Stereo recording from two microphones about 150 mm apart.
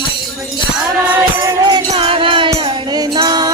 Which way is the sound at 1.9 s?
40° right (ahead or behind).